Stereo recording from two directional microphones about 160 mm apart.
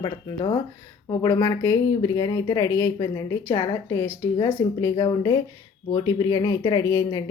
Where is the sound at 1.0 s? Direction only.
25° left (ahead or behind).